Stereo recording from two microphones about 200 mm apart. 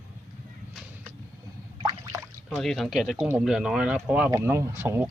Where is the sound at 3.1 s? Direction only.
10° right (ahead or behind).